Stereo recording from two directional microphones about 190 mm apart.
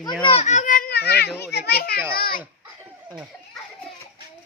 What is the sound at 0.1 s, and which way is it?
Speech, 5° left (ahead or behind).